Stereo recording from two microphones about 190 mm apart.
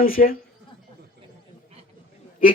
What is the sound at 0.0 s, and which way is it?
Speech, 50° left (ahead or behind).